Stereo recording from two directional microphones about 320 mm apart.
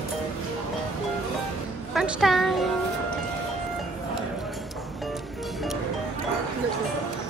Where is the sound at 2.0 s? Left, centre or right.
Centre.